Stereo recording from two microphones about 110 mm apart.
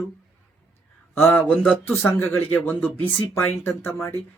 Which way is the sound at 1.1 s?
20° left (ahead or behind).